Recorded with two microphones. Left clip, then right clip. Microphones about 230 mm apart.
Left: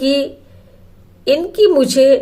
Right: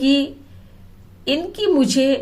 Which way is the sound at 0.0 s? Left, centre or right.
Left.